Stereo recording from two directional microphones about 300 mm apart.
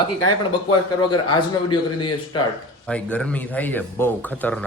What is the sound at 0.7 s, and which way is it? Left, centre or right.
Speech, centre.